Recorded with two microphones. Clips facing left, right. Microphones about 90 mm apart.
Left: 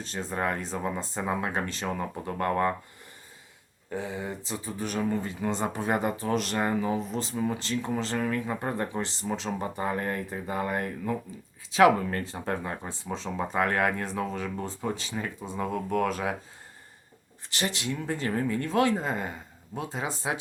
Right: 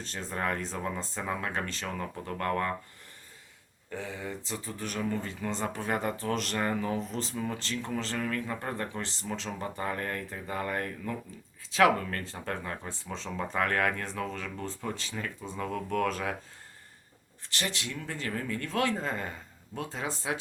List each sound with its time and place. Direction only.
0.0 s speech: 10° left (ahead or behind)
3.8 s speech: 15° left (ahead or behind)
17.5 s speech: 15° left (ahead or behind)